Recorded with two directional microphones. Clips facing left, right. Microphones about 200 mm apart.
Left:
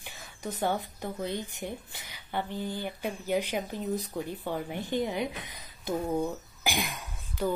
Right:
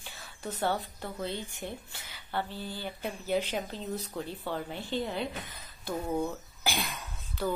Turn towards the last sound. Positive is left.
turn(degrees=15)  # may be behind; listen again after turning